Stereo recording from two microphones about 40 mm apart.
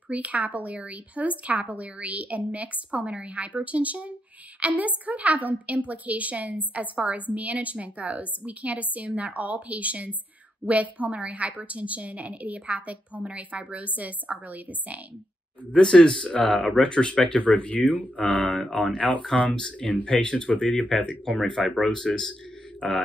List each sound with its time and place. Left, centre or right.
0.1 s a woman's voice: right
15.8 s speech: centre
16.3 s speech: left
17.5 s speech: left
21.4 s speech: centre